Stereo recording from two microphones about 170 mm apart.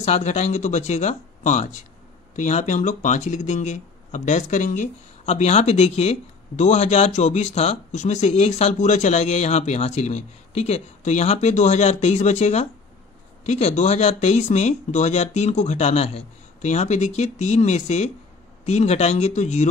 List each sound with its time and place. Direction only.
0.0 s speech: 40° left (ahead or behind)